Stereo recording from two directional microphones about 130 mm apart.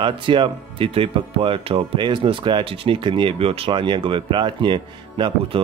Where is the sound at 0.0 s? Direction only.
40° right (ahead or behind).